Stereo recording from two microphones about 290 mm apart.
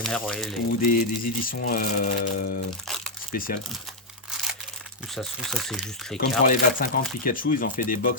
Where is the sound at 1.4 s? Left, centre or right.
Left.